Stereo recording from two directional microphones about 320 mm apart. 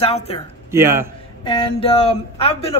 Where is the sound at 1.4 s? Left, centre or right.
Centre.